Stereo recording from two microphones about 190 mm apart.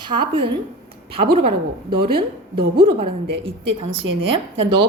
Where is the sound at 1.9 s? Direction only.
25° right (ahead or behind).